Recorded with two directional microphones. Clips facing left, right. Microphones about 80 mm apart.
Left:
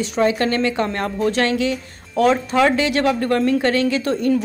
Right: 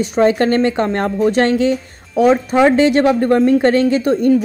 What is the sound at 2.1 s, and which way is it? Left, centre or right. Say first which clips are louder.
Speech: right 4 dB; centre.